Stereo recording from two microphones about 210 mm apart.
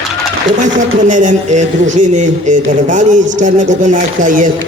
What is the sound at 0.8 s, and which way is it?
Speech, 35° right (ahead or behind).